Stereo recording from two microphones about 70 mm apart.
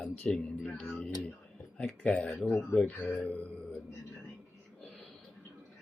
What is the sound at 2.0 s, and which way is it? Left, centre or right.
Speech, centre.